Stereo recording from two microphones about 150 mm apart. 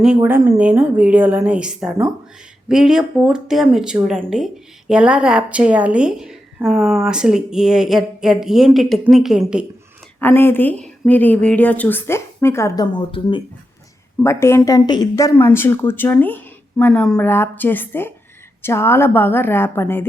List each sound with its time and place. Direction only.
0.0 s a woman's voice: 10° right (ahead or behind)
10.2 s speech: 15° left (ahead or behind); by 13.4 s 35° left (ahead or behind)
14.2 s speech: 15° left (ahead or behind)